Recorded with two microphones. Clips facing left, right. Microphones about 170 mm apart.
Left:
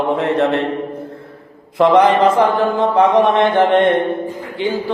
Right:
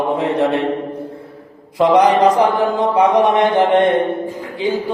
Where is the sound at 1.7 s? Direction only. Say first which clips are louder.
Left 1 dB; 15° right (ahead or behind).